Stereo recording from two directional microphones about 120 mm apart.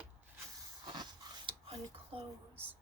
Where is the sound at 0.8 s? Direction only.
35° right (ahead or behind).